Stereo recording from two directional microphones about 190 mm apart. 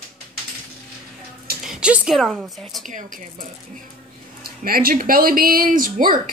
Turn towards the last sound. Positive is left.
turn(degrees=-45)  # may be behind; listen again after turning